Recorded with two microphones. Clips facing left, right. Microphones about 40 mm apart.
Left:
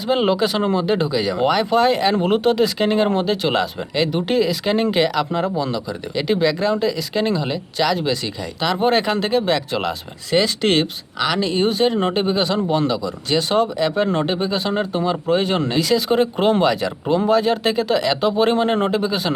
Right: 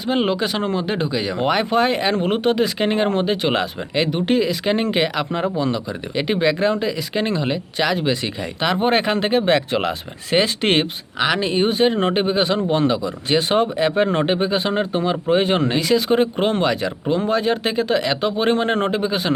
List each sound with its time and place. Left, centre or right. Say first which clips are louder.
0.1 s speech: left 2 dB; centre
18.9 s speech: left 1 dB; centre